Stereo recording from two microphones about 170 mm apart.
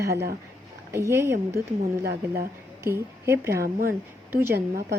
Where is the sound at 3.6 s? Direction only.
55° right (ahead or behind).